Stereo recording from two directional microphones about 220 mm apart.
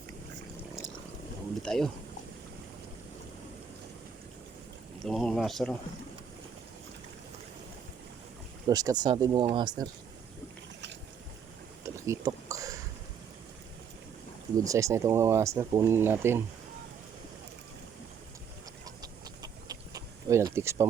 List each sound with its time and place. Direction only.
1.6 s speech: centre (ahead or behind)
5.0 s speech: centre (ahead or behind)
8.6 s speech: 15° right (ahead or behind)
11.9 s a sound: 15° right (ahead or behind)
14.6 s speech: 15° right (ahead or behind)
19.0 s a sound: 15° right (ahead or behind)